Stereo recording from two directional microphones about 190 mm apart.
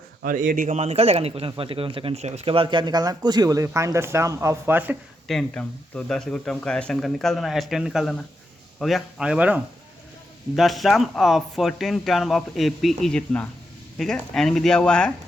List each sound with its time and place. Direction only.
0.2 s a man's voice: 45° right (ahead or behind); by 4.9 s 10° right (ahead or behind)
5.3 s speech: 5° left (ahead or behind)